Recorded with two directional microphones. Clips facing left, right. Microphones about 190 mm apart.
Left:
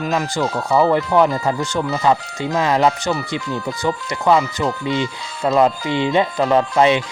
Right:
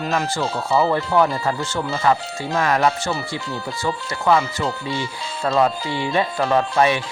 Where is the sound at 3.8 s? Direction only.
20° left (ahead or behind).